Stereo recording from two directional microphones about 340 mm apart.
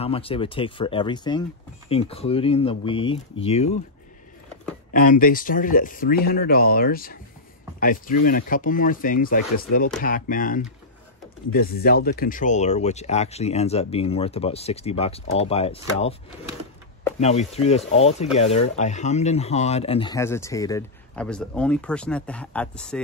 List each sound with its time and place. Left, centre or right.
0.0 s speech: centre
4.9 s speech: left
8.2 s speech: left
17.2 s speech: centre